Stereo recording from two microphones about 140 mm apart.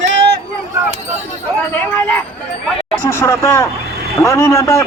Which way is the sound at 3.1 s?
20° left (ahead or behind).